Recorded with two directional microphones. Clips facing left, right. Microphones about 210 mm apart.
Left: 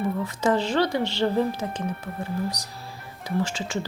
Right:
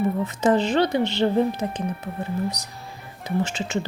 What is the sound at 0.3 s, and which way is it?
Speech, 20° right (ahead or behind).